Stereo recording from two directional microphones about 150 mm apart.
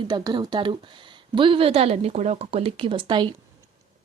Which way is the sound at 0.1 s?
30° right (ahead or behind).